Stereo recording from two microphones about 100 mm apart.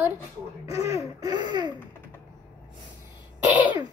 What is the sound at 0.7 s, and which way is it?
Laughter, 30° right (ahead or behind).